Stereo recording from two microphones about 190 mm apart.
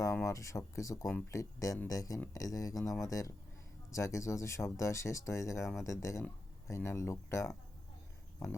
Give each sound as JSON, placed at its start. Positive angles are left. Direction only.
{"t": 0.0, "sound": "speech", "side_deg": 15}